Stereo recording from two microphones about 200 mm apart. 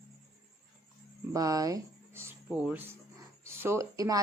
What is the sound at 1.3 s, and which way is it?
Speech, 15° right (ahead or behind).